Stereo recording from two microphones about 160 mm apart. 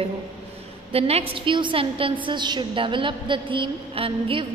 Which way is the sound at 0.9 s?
40° right (ahead or behind).